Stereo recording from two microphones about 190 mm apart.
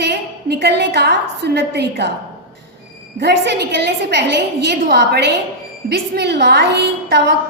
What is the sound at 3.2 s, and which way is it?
A woman's voice, 60° right (ahead or behind).